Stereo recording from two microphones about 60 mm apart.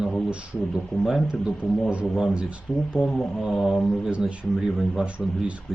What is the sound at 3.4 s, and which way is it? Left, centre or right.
Speech, centre.